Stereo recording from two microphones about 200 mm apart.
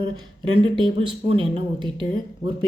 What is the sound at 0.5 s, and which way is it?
Speech, 25° right (ahead or behind).